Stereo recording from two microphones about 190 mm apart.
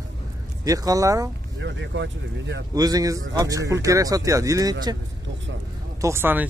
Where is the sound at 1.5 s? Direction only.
70° right (ahead or behind).